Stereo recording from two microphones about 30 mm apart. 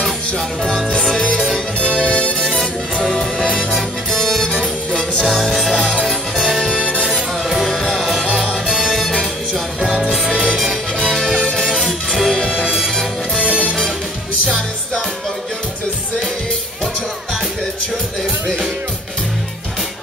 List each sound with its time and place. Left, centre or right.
2.0 s music: left
5.6 s music: centre
7.9 s music: centre
11.0 s music: left
11.8 s music: centre
13.4 s music: right